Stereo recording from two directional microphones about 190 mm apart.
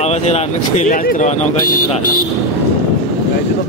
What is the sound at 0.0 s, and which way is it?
Speech, 35° left (ahead or behind).